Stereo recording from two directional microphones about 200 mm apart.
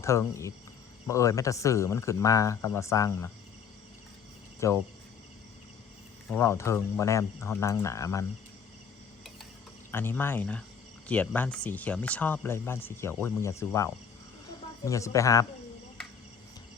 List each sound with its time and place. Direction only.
0.0 s speech: 15° left (ahead or behind)
4.6 s speech: 15° left (ahead or behind)
6.3 s speech: 15° left (ahead or behind)
9.9 s speech: 10° left (ahead or behind)